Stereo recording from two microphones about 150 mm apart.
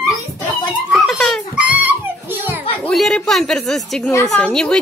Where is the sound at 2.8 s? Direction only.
Centre (ahead or behind).